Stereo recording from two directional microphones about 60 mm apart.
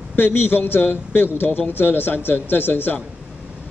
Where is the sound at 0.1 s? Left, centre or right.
Left.